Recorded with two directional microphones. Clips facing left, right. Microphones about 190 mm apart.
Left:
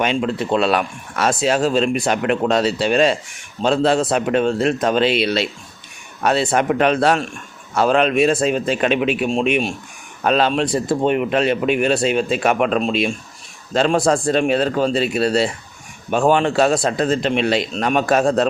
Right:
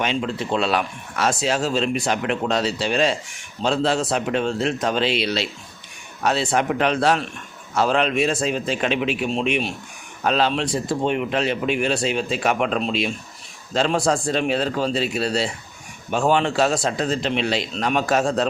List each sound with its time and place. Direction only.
0.0 s speech: 55° left (ahead or behind)